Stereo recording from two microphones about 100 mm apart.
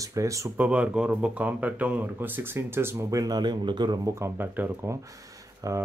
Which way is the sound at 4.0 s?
30° right (ahead or behind).